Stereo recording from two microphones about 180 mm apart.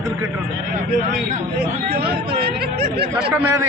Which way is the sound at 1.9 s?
60° right (ahead or behind).